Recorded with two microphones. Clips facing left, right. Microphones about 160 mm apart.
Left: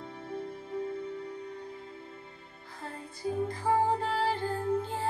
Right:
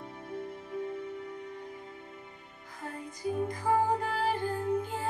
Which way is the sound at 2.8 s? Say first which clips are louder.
Even; 15° right (ahead or behind).